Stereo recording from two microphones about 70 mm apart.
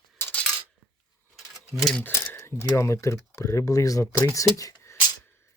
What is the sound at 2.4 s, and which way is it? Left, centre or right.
Speech, left.